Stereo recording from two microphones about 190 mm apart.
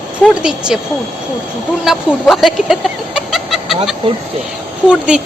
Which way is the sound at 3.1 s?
Centre (ahead or behind).